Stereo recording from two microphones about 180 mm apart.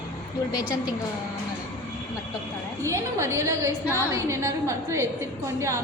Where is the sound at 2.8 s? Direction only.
15° right (ahead or behind).